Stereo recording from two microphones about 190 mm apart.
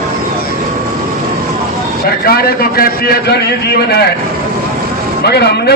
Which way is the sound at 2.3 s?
55° left (ahead or behind).